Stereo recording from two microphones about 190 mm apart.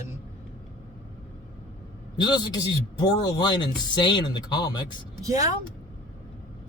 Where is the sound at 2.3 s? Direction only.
20° left (ahead or behind).